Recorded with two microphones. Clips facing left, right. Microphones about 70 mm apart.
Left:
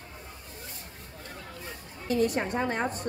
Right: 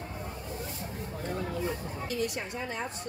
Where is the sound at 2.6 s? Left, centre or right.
Left.